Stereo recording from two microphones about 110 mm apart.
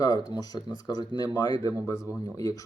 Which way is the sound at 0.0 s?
40° left (ahead or behind).